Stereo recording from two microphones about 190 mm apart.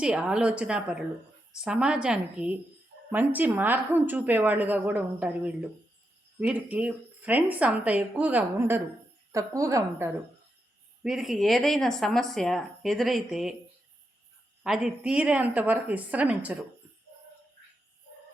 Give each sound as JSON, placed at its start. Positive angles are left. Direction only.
{"t": 0.0, "sound": "speech", "side_deg": -5}
{"t": 11.0, "sound": "speech", "side_deg": 0}
{"t": 14.6, "sound": "speech", "side_deg": -5}